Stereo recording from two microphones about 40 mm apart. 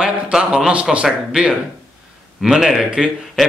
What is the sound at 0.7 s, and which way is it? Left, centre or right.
Speech, right.